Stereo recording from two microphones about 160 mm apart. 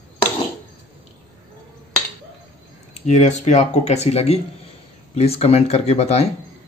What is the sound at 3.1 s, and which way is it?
Speech, 50° left (ahead or behind).